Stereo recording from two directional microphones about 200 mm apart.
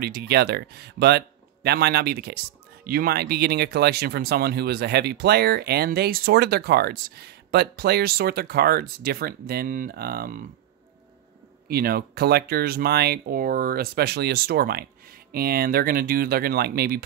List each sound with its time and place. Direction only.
0.0 s speech: 55° right (ahead or behind)
11.7 s speech: 50° right (ahead or behind)